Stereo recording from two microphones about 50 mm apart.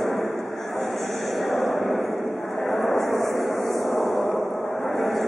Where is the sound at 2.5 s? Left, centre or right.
Centre.